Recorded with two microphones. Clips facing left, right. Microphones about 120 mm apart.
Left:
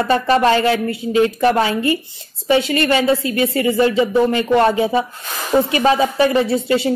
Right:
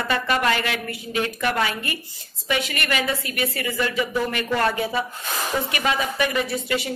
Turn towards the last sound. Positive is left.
turn(degrees=30)  # may be behind; listen again after turning